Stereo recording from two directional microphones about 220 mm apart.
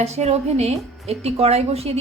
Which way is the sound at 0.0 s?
30° right (ahead or behind).